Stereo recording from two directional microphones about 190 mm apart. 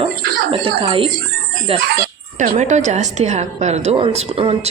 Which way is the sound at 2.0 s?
40° right (ahead or behind).